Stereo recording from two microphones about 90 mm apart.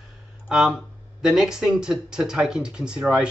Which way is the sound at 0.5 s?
5° right (ahead or behind).